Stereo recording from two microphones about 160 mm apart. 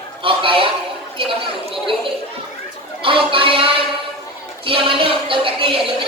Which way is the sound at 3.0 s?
35° right (ahead or behind).